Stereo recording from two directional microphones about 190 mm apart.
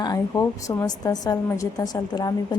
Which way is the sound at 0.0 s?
20° left (ahead or behind).